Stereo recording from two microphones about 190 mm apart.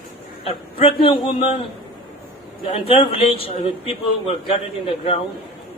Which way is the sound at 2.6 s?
30° left (ahead or behind).